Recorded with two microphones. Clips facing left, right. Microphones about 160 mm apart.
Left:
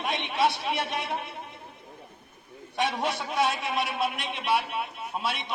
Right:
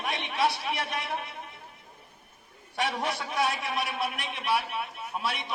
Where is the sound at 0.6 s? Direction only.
25° left (ahead or behind).